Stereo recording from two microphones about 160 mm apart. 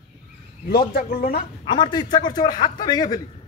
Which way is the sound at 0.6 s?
70° left (ahead or behind).